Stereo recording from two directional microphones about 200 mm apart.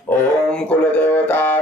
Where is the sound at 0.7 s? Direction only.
5° left (ahead or behind).